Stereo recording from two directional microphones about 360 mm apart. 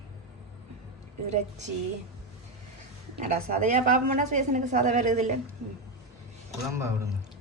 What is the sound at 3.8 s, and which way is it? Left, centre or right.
A woman's voice, right.